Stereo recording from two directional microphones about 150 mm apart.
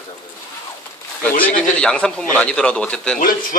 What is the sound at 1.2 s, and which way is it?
A man's voice, 10° left (ahead or behind).